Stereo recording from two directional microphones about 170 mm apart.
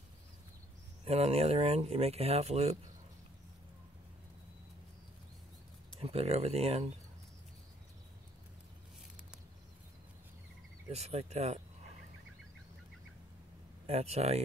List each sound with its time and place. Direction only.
1.0 s speech: 40° right (ahead or behind)
5.9 s speech: 35° right (ahead or behind)
10.9 s speech: 40° right (ahead or behind)
13.8 s speech: 40° right (ahead or behind)